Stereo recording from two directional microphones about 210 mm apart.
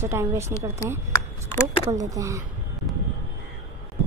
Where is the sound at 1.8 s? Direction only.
15° right (ahead or behind).